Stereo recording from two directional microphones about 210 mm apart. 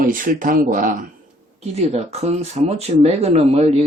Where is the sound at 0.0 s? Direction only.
40° right (ahead or behind).